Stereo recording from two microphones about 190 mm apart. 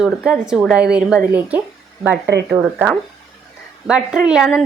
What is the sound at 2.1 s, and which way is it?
Speech, 60° right (ahead or behind).